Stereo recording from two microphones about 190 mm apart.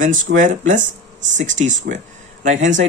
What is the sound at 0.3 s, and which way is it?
Speech, 70° right (ahead or behind).